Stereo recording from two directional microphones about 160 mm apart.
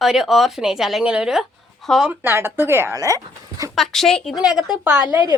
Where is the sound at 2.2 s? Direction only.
15° right (ahead or behind).